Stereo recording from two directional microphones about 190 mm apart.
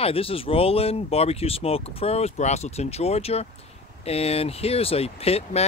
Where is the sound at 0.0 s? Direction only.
30° left (ahead or behind).